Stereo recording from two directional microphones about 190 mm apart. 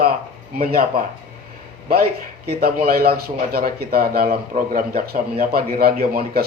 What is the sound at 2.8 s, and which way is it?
Speech, 55° right (ahead or behind).